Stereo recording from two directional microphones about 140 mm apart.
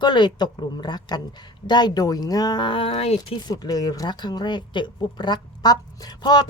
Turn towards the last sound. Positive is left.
turn(degrees=30)  # may be behind; listen again after turning